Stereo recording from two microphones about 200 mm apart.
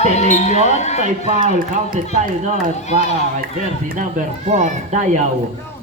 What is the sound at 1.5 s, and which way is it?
A man's voice, 45° right (ahead or behind).